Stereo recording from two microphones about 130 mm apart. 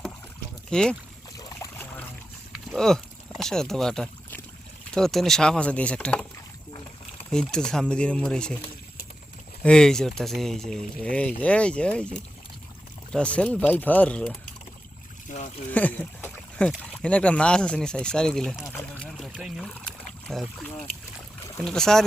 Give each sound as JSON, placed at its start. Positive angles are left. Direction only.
{"t": 0.7, "sound": "speech", "side_deg": 5}
{"t": 1.7, "sound": "boat", "side_deg": 15}
{"t": 2.6, "sound": "speech", "side_deg": 5}
{"t": 7.3, "sound": "speech", "side_deg": 5}
{"t": 9.6, "sound": "speech", "side_deg": 5}
{"t": 15.3, "sound": "speech", "side_deg": 90}
{"t": 15.7, "sound": "speech", "side_deg": 10}
{"t": 18.9, "sound": "boat", "side_deg": 5}
{"t": 19.3, "sound": "speech", "side_deg": -5}